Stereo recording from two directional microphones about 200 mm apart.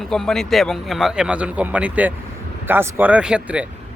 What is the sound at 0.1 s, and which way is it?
Speech, centre (ahead or behind).